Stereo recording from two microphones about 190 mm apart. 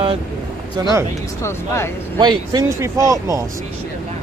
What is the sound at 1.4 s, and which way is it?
Speech, 15° left (ahead or behind).